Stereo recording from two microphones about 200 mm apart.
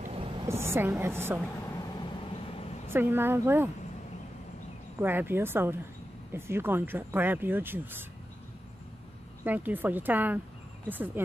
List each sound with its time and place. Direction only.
0.0 s a sound: 30° right (ahead or behind)
0.5 s speech: 10° right (ahead or behind)
2.0 s vehicle: 25° left (ahead or behind)
2.9 s speech: 10° right (ahead or behind)
5.0 s speech: 10° right (ahead or behind)
9.4 s speech: 10° right (ahead or behind)